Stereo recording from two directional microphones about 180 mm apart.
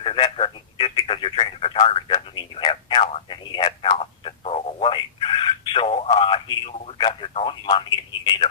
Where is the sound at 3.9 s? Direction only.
35° left (ahead or behind).